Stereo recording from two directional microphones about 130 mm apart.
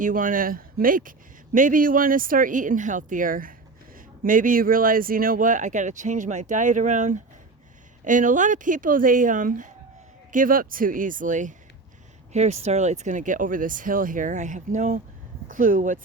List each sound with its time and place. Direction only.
0.0 s speech: 90° right; by 7.2 s 70° right (ahead or behind)
8.0 s speech: 85° right
12.3 s speech: 60° right (ahead or behind); by 16.0 s 85° right